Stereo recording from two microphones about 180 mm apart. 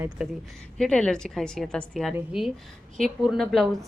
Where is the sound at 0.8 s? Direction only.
5° left (ahead or behind).